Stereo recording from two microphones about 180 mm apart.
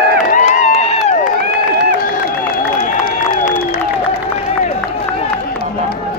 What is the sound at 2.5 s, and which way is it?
Crowd, 55° left (ahead or behind).